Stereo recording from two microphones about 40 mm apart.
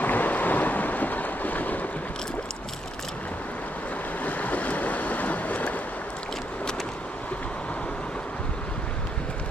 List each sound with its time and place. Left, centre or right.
0.0 s boat: left
4.2 s waves: left